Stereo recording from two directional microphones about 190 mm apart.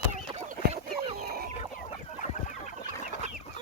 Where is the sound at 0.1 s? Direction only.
40° right (ahead or behind).